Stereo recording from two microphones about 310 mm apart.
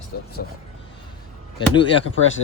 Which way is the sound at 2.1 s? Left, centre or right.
Left.